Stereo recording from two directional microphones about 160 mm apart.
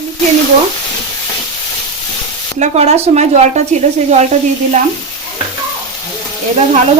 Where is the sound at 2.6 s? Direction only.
40° right (ahead or behind).